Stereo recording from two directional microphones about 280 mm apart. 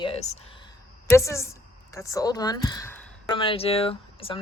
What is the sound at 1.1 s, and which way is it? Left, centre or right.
Speech, centre.